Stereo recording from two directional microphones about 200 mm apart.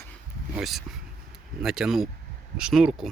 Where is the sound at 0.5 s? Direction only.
Centre (ahead or behind).